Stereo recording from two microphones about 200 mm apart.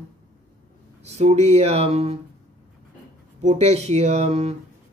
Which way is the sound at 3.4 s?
35° right (ahead or behind).